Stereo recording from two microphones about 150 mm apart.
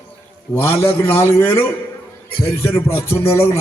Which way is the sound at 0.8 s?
15° left (ahead or behind).